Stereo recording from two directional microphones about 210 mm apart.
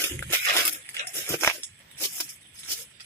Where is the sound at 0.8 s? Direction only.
10° left (ahead or behind).